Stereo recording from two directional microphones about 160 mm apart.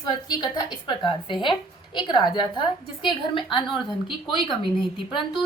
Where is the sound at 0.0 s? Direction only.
25° left (ahead or behind).